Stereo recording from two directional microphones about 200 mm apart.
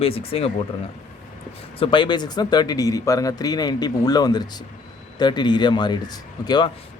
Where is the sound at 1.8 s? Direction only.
25° left (ahead or behind).